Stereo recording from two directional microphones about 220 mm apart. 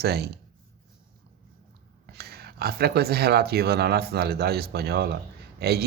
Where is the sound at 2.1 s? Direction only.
45° right (ahead or behind).